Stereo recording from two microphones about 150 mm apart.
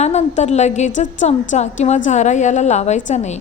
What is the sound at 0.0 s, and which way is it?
A woman's voice, 45° left (ahead or behind).